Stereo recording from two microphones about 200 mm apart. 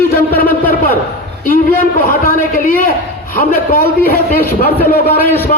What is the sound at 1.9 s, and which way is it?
A man's voice, 45° left (ahead or behind).